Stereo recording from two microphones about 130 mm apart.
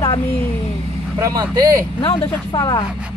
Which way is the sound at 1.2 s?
30° right (ahead or behind).